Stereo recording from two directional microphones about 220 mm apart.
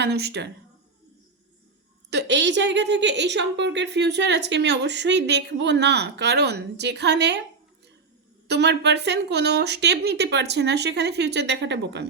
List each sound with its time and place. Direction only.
0.0 s a woman's voice: 50° right (ahead or behind)
2.0 s a woman's voice: 50° right (ahead or behind)
8.4 s a woman's voice: 50° right (ahead or behind)